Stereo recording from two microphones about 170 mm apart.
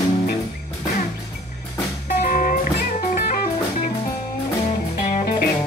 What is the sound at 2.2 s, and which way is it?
Music, 50° left (ahead or behind).